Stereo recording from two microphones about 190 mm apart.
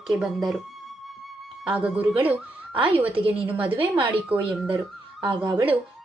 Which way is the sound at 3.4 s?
10° right (ahead or behind).